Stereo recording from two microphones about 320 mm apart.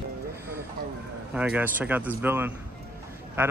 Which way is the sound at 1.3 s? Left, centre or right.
Centre.